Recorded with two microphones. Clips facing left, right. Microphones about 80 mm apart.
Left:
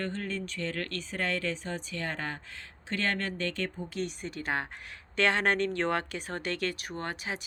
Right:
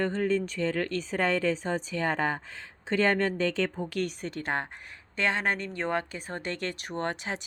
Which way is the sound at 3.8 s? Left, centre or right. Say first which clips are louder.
Right 4 dB; right.